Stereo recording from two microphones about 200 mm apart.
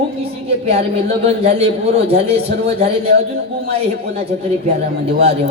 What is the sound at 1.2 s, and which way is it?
A man's voice, 30° right (ahead or behind).